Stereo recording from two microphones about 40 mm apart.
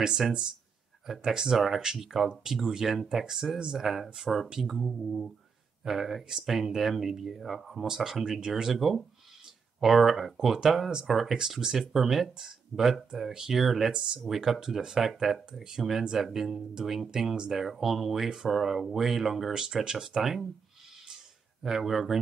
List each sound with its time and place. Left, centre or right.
0.0 s speech: centre
2.2 s speech: centre
3.8 s speech: centre
7.8 s speech: centre
11.3 s speech: centre
13.9 s speech: centre
14.2 s speech: centre
19.6 s speech: centre
21.6 s speech: centre